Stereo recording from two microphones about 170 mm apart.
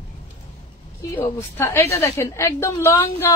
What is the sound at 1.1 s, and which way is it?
A woman's voice, 15° left (ahead or behind).